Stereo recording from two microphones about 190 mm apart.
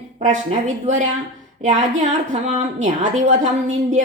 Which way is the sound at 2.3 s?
40° right (ahead or behind).